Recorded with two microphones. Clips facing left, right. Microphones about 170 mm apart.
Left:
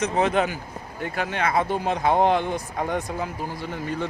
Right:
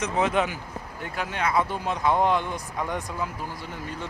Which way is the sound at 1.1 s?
55° left (ahead or behind).